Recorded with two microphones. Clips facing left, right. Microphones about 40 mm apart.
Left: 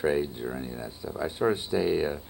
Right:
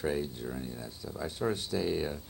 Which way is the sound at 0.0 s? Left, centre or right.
Left.